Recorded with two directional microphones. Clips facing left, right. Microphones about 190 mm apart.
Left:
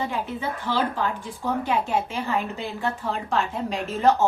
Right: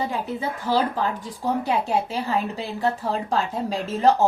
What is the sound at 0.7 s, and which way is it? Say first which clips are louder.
A woman's voice: right 3 dB; 40° right (ahead or behind).